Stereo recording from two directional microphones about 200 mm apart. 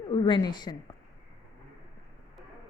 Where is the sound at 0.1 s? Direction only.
25° left (ahead or behind).